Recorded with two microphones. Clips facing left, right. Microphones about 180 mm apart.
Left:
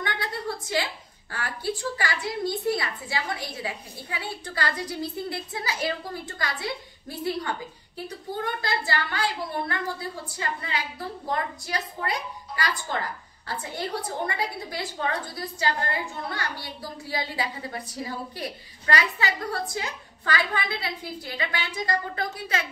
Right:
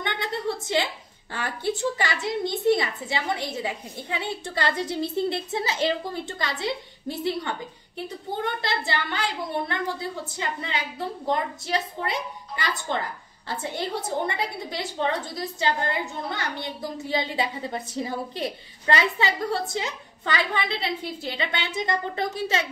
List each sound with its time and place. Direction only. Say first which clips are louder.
0.0 s a sound: right 3 dB; 25° right (ahead or behind)
1.3 s a woman's voice: right 3 dB; 25° right (ahead or behind)
8.5 s a woman's voice: even; 25° right (ahead or behind)